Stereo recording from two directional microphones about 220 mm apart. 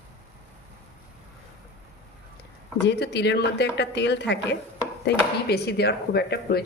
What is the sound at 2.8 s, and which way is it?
Speech, 50° left (ahead or behind).